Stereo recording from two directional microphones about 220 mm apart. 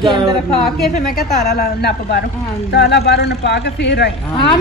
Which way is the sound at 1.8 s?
45° left (ahead or behind).